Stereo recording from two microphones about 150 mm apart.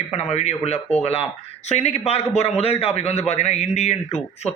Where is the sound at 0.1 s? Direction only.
45° left (ahead or behind).